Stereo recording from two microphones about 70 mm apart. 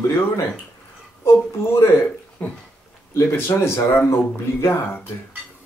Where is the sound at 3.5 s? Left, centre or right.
Left.